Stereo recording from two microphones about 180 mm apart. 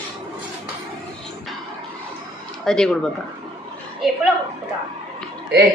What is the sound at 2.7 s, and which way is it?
Speech, 5° left (ahead or behind).